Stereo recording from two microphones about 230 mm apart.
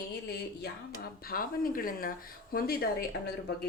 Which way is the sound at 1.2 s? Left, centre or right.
Left.